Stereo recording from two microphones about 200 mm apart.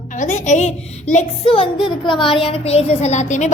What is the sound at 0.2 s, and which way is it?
A woman's voice, 35° left (ahead or behind).